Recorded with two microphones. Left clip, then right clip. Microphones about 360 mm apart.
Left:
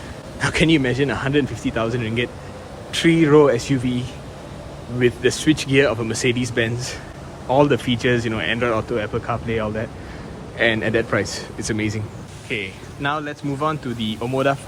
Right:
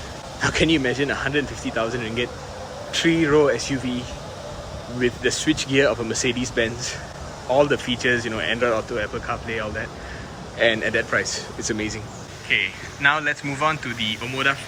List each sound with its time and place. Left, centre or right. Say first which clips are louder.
0.3 s speech: left 2 dB; centre
12.5 s speech: right 5 dB; centre